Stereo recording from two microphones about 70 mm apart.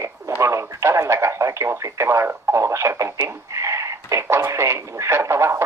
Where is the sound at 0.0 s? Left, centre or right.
Right.